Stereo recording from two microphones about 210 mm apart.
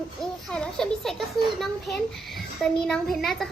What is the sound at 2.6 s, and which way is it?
Speech, centre (ahead or behind).